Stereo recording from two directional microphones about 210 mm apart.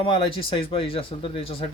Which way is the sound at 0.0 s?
25° left (ahead or behind).